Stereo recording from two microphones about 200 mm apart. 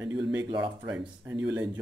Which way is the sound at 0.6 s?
5° right (ahead or behind).